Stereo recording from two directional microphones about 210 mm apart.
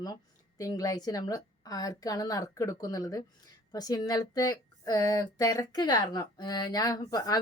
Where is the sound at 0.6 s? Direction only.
15° left (ahead or behind).